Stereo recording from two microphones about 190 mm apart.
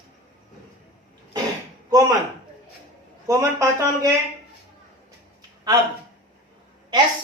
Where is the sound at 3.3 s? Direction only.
15° right (ahead or behind).